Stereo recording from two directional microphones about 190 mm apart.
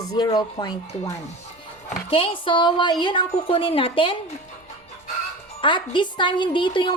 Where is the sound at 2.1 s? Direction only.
30° left (ahead or behind).